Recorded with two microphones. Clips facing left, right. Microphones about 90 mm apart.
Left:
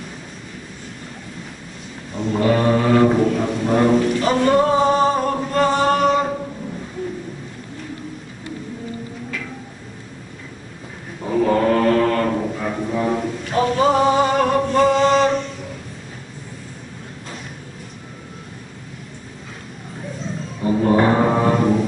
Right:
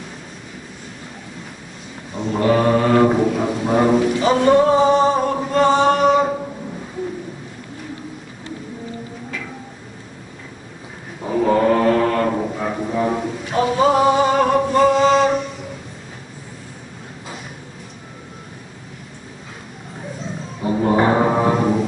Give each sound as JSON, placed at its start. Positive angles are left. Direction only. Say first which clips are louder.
{"t": 2.1, "sound": "mantra", "louder": "right 1 dB", "side_deg": -5}
{"t": 11.2, "sound": "mantra", "louder": "right 1 dB", "side_deg": -5}
{"t": 13.4, "sound": "male singing", "louder": "right 1 dB", "side_deg": -5}
{"t": 20.6, "sound": "a sound", "louder": "left 1 dB", "side_deg": -10}